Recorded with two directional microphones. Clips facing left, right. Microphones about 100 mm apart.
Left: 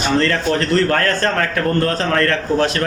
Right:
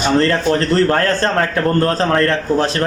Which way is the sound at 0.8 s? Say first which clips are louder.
Right 2 dB; 30° right (ahead or behind).